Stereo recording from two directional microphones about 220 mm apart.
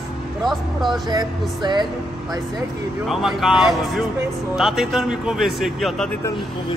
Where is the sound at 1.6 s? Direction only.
20° right (ahead or behind).